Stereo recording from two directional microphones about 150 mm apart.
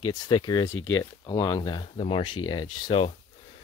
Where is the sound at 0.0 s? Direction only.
30° left (ahead or behind).